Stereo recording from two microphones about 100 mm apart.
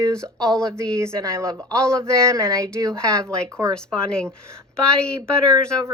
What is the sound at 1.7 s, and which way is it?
Speech, 10° left (ahead or behind).